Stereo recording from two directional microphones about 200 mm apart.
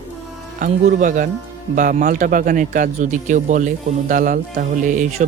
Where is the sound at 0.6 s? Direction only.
40° right (ahead or behind).